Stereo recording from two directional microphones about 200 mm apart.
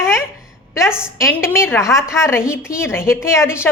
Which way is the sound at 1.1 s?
15° left (ahead or behind).